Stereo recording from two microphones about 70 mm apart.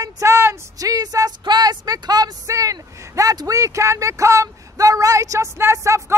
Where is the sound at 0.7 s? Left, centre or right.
Right.